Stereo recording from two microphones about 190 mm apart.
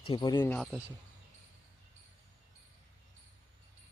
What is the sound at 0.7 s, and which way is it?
Speech, 5° right (ahead or behind).